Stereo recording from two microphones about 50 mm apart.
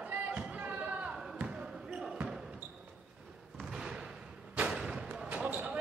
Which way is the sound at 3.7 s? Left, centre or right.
Centre.